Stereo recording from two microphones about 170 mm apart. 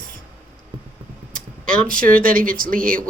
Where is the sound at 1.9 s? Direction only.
55° right (ahead or behind).